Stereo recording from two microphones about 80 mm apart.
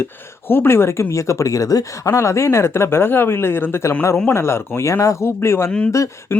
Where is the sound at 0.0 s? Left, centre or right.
Left.